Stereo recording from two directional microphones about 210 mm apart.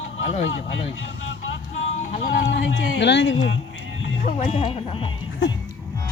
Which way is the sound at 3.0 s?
55° left (ahead or behind).